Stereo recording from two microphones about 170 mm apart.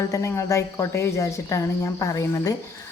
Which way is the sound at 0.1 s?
15° left (ahead or behind).